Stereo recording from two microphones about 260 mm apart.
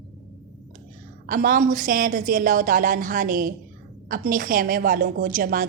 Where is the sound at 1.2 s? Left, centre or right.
Right.